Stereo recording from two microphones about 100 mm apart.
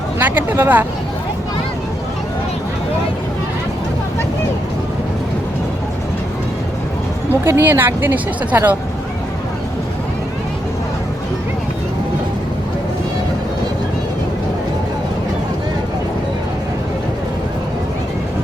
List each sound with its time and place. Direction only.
0.2 s a woman's voice: 20° right (ahead or behind)
7.4 s a woman's voice: 20° right (ahead or behind)